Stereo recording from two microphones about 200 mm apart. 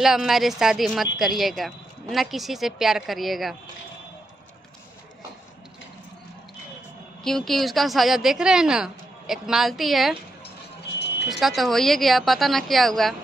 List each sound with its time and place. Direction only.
0.0 s a woman's voice: centre (ahead or behind)
7.2 s a woman's voice: centre (ahead or behind)
10.8 s music: 55° left (ahead or behind)
11.2 s a woman's voice: centre (ahead or behind)